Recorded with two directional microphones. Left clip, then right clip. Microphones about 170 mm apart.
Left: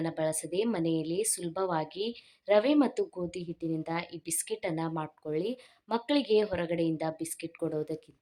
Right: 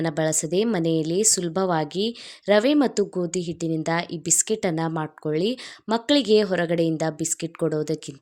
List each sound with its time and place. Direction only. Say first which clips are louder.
0.0 s speech: right 8 dB; 35° right (ahead or behind)